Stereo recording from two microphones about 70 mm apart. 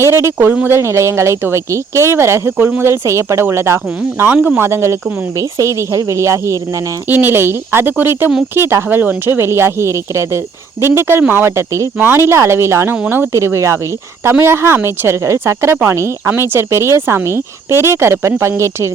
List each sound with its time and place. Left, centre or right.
0.0 s speech: right
2.9 s speech: right
4.4 s speech: right
4.6 s speech: right
7.1 s speech: right
11.9 s speech: right
13.3 s speech: right